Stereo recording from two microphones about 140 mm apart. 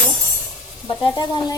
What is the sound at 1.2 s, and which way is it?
Speech, 30° left (ahead or behind).